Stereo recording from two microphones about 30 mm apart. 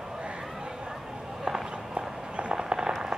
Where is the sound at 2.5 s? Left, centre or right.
Right.